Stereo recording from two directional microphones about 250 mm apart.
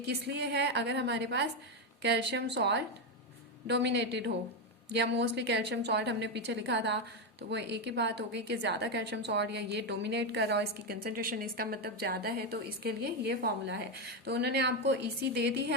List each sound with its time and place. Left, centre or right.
0.0 s a woman's voice: right